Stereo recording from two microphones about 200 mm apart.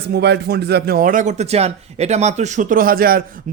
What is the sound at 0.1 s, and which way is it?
Speech, 55° right (ahead or behind).